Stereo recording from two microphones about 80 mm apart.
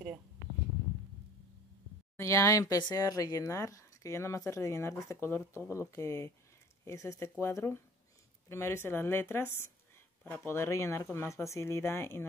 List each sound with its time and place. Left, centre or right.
2.1 s speech: left